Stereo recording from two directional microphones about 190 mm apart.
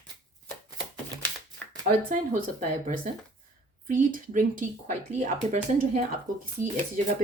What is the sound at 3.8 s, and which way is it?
Speech, 45° right (ahead or behind).